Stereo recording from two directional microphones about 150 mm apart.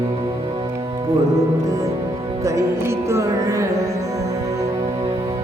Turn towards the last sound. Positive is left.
turn(degrees=-20)  # may be behind; listen again after turning